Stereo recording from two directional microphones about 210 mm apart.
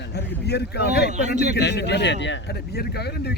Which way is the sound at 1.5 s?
55° left (ahead or behind).